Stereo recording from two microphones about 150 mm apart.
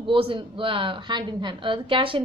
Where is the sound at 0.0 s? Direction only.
35° right (ahead or behind).